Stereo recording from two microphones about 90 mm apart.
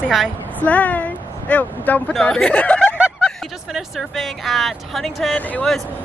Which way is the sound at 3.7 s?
Centre (ahead or behind).